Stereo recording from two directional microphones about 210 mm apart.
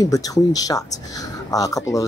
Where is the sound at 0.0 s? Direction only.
15° left (ahead or behind).